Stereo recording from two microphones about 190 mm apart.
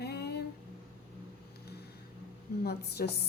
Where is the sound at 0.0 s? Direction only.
60° left (ahead or behind).